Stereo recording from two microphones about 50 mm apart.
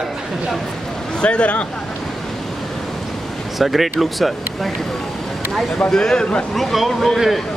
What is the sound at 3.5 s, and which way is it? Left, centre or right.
Speech, centre.